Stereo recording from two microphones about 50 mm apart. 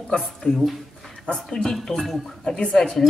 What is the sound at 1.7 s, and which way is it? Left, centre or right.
Speech, centre.